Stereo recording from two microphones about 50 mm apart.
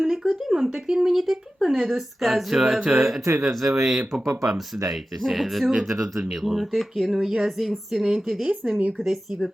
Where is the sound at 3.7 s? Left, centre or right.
Centre.